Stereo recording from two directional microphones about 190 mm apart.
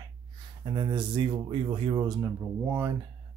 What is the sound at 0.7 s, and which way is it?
Speech, 25° right (ahead or behind).